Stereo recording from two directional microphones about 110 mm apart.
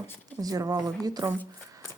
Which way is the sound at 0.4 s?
35° right (ahead or behind).